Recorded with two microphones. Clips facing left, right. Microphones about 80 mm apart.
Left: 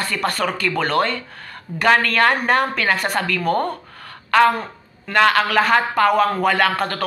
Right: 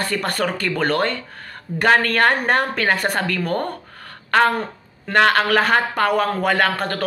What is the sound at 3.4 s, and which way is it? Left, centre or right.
Speech, left.